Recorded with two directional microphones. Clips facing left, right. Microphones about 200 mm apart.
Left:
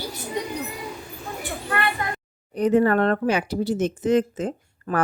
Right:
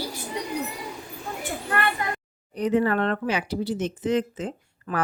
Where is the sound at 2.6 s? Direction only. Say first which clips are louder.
Left 4 dB; 45° left (ahead or behind).